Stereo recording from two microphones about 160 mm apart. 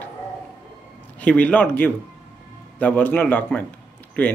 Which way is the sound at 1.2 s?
10° left (ahead or behind).